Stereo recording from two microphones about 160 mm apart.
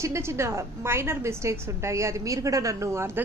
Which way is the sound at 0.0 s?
15° right (ahead or behind).